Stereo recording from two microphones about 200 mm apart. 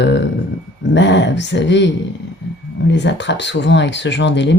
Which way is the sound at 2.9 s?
60° left (ahead or behind).